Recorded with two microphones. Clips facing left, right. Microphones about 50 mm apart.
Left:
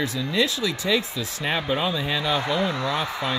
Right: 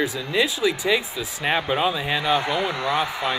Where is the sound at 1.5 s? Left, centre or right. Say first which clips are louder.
Right 2 dB; right.